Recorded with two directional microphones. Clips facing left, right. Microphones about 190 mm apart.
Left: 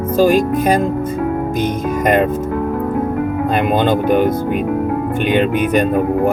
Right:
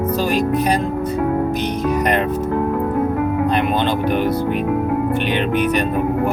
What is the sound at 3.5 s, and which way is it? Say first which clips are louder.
Speech: left 3 dB; 45° left (ahead or behind).